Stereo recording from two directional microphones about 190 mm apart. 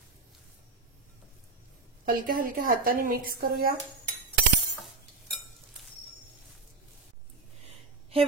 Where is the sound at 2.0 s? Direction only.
50° right (ahead or behind).